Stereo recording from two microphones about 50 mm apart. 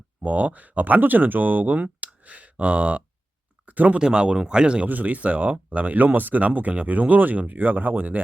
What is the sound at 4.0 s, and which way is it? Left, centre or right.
Speech, centre.